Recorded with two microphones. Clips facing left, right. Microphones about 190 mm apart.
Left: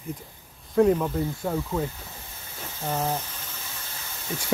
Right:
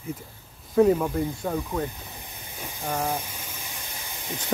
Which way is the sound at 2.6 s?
15° right (ahead or behind).